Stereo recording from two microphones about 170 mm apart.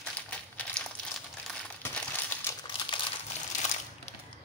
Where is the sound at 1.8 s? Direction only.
15° left (ahead or behind).